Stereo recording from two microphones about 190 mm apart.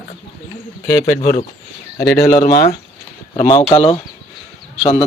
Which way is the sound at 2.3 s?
45° left (ahead or behind).